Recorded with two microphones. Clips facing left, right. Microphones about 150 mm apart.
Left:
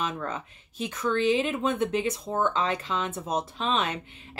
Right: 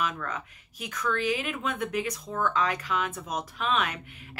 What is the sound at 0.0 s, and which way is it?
Speech, 25° left (ahead or behind).